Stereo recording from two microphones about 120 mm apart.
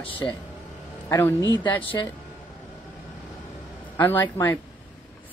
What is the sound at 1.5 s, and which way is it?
Speech, 40° left (ahead or behind).